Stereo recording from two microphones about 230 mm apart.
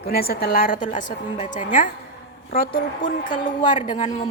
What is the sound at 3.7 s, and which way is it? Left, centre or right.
Speech, left.